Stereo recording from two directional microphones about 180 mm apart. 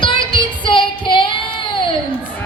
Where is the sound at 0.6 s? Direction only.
30° left (ahead or behind).